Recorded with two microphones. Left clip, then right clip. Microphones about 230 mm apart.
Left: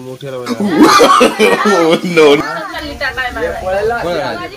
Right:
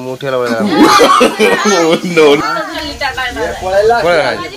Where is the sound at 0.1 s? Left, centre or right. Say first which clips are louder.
Right 9 dB; right.